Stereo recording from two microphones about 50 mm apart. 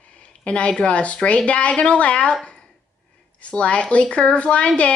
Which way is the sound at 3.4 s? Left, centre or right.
Left.